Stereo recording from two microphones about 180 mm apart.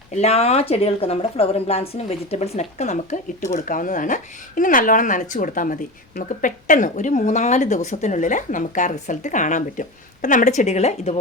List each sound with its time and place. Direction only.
0.2 s a woman's voice: 35° left (ahead or behind)